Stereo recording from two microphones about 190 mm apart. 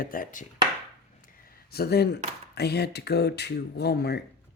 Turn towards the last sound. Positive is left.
turn(degrees=60)  # may be behind; listen again after turning